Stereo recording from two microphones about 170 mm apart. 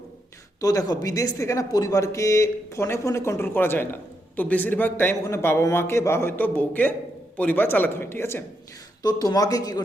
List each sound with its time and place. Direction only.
0.6 s speech: 20° left (ahead or behind)